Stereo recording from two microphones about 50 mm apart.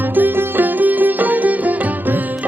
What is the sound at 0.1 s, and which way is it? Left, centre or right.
Music, right.